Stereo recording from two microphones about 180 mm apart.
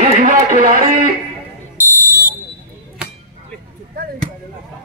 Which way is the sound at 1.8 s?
45° left (ahead or behind).